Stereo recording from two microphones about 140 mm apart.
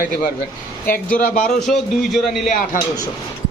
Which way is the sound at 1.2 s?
65° left (ahead or behind).